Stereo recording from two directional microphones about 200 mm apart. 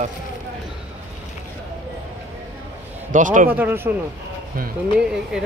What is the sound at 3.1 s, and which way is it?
Speech, 40° right (ahead or behind).